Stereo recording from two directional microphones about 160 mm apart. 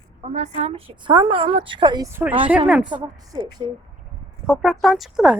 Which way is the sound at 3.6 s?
25° right (ahead or behind).